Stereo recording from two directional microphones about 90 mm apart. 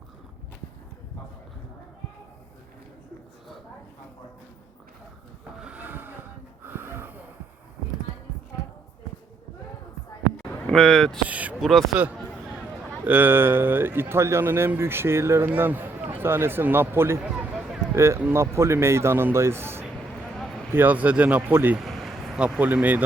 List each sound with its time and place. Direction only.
5.5 s vehicle: 15° right (ahead or behind)
6.7 s snort: 25° right (ahead or behind)
10.7 s speech: 5° left (ahead or behind)
11.3 s speech: 15° right (ahead or behind)
11.6 s speech: centre (ahead or behind)
13.1 s speech: 25° right (ahead or behind)
20.3 s a sound: 5° left (ahead or behind)
20.7 s speech: 15° right (ahead or behind)
21.8 s vehicle: centre (ahead or behind)
22.4 s speech: 15° right (ahead or behind)